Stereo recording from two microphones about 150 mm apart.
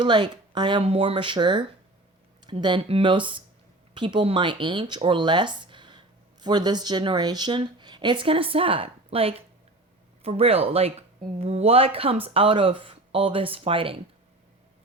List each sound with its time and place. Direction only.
0.0 s speech: 30° right (ahead or behind)